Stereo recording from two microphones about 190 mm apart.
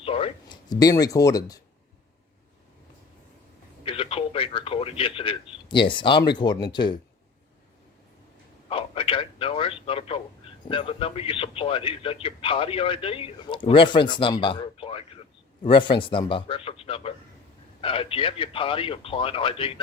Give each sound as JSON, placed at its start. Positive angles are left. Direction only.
{"t": 0.0, "sound": "speech", "side_deg": 30}
{"t": 3.8, "sound": "a man's voice", "side_deg": 30}
{"t": 8.7, "sound": "a man's voice", "side_deg": 30}